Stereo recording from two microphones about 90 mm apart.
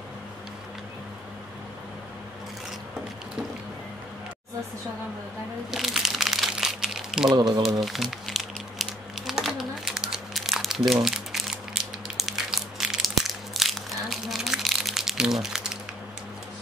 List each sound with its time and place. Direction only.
5.7 s crumpling: 5° right (ahead or behind)
7.3 s speech: 50° right (ahead or behind)
7.8 s crumpling: centre (ahead or behind)